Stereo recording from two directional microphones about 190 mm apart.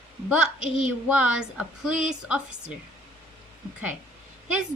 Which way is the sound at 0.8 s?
5° right (ahead or behind).